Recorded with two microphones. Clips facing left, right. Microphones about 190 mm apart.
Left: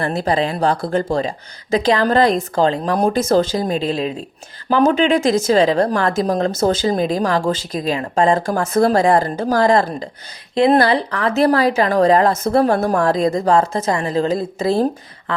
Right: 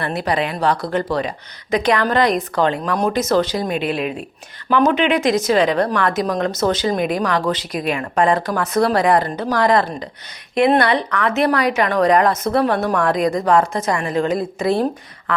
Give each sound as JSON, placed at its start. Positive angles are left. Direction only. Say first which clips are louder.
{"t": 0.0, "sound": "speech", "louder": "left 2 dB", "side_deg": 25}
{"t": 12.6, "sound": "speech", "louder": "left 2 dB", "side_deg": 40}
{"t": 13.0, "sound": "speech", "louder": "left 1 dB", "side_deg": 25}
{"t": 15.3, "sound": "a sound", "louder": "right 1 dB", "side_deg": 25}